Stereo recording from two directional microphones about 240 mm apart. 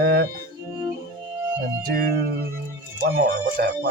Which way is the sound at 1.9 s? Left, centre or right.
Right.